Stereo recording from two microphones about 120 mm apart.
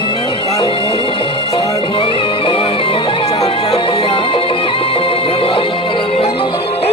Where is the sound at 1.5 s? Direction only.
45° left (ahead or behind).